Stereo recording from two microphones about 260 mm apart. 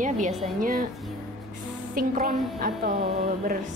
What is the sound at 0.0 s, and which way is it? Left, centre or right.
Speech, right.